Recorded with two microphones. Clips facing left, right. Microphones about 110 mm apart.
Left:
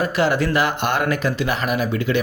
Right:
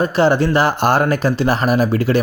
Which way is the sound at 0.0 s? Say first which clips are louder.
Right 5 dB; 30° right (ahead or behind).